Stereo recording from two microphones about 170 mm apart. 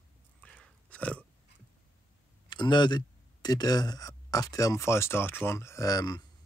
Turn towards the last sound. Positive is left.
turn(degrees=25)  # may be behind; listen again after turning